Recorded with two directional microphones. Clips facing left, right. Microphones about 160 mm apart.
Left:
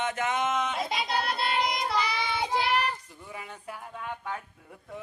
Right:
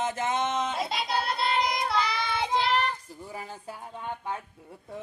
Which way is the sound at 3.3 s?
35° right (ahead or behind).